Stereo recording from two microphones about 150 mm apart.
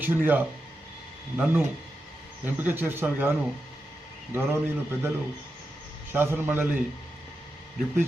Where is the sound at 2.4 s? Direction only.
15° right (ahead or behind).